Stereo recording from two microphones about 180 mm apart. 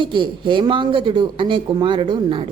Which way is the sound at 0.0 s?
25° right (ahead or behind).